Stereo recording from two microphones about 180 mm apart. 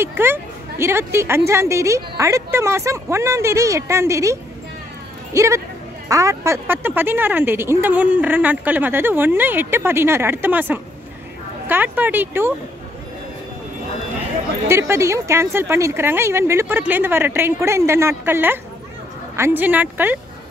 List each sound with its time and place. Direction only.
0.0 s speech: 10° right (ahead or behind)
14.7 s speech: 15° right (ahead or behind)